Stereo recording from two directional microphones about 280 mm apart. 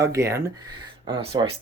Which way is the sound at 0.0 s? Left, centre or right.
Centre.